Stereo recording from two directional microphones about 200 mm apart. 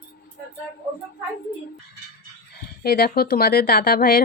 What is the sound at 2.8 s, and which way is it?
Speech, 50° left (ahead or behind).